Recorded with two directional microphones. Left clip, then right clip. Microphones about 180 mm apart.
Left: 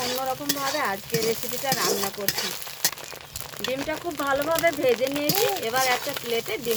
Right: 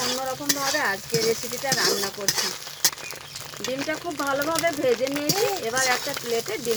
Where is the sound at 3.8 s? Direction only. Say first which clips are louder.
Right 1 dB; 10° left (ahead or behind).